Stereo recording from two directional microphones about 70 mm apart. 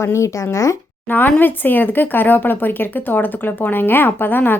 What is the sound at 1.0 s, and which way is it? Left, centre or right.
A woman's voice, left.